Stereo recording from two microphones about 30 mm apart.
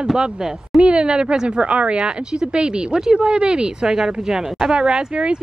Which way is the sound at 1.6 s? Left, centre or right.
Right.